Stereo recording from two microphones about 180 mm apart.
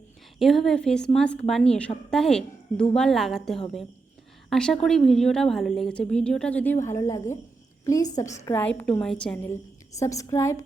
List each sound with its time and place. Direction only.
0.3 s a woman's voice: centre (ahead or behind)